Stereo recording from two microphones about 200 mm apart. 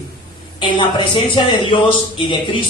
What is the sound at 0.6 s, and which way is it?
A man's voice, 25° left (ahead or behind).